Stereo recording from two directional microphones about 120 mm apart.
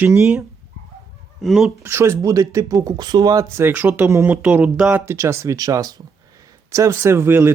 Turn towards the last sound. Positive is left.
turn(degrees=-20)  # may be behind; listen again after turning